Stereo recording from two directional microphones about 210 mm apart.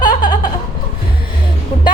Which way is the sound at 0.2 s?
20° left (ahead or behind).